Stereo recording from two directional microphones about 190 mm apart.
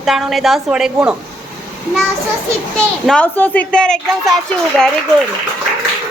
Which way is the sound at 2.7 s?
5° left (ahead or behind).